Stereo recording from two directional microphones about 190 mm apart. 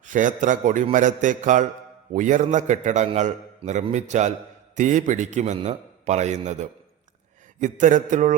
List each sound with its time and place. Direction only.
0.0 s a man's voice: 40° right (ahead or behind)